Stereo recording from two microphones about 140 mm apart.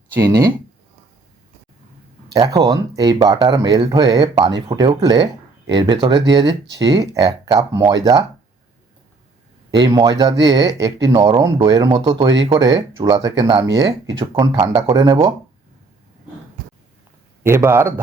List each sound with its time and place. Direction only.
0.2 s speech: 25° right (ahead or behind)
2.3 s speech: 25° right (ahead or behind)
9.7 s speech: 30° right (ahead or behind)
13.0 s speech: 40° right (ahead or behind)
14.3 s speech: 40° right (ahead or behind)
14.8 s speech: 25° right (ahead or behind)
17.4 s speech: 20° right (ahead or behind)